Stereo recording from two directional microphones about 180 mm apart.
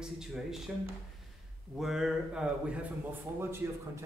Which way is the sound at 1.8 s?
Centre (ahead or behind).